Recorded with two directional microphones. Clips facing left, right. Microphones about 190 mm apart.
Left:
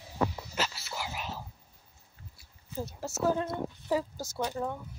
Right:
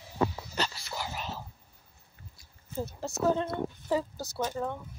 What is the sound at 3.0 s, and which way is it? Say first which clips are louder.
A woman's voice: right 1 dB; 5° left (ahead or behind).